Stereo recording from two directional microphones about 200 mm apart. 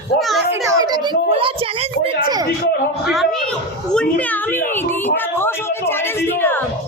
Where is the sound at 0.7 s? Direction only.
20° right (ahead or behind).